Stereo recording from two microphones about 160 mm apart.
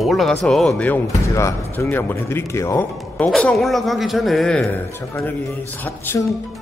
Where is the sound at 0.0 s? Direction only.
Centre (ahead or behind).